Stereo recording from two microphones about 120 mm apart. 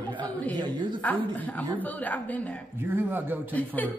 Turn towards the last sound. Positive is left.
turn(degrees=15)  # may be behind; listen again after turning